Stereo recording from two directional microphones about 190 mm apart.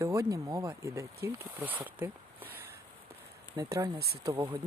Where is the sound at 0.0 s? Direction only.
15° right (ahead or behind).